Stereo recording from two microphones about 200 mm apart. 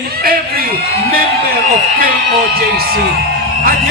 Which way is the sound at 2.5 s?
50° right (ahead or behind).